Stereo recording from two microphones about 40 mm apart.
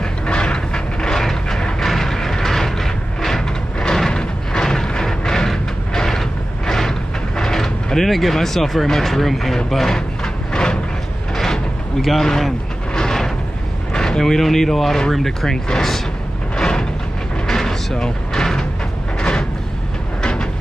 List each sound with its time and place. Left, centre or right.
0.0 s mechanisms: left
1.2 s wood: centre
1.9 s vehicle: centre
3.8 s a sound: centre
4.8 s vehicle: centre
5.9 s a sound: centre
12.9 s vehicle: centre
13.9 s speech: centre
16.5 s a sound: centre
17.5 s music: centre
19.1 s a sound: left
20.2 s train: centre